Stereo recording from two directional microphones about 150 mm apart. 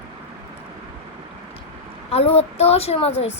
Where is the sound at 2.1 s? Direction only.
40° left (ahead or behind).